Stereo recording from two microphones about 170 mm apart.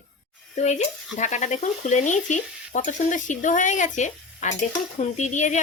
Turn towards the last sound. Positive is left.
turn(degrees=45)  # may be behind; listen again after turning